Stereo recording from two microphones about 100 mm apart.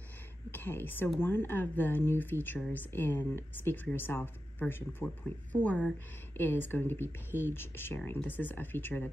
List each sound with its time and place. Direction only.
0.5 s a woman's voice: 20° left (ahead or behind)